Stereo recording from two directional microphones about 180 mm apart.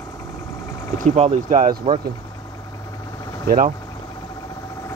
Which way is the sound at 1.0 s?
40° right (ahead or behind).